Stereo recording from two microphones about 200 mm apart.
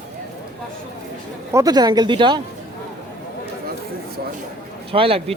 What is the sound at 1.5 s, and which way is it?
Speech, 20° right (ahead or behind).